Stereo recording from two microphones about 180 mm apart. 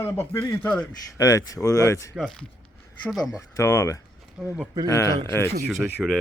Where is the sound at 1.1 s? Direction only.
20° left (ahead or behind).